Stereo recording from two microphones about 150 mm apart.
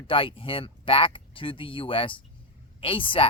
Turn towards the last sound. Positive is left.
turn(degrees=35)  # may be behind; listen again after turning